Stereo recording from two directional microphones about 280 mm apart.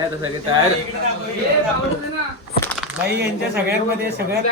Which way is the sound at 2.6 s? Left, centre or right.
Centre.